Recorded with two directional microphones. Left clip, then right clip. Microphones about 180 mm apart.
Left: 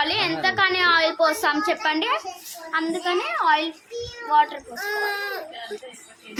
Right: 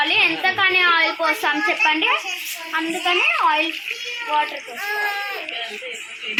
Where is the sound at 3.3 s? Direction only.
Centre (ahead or behind).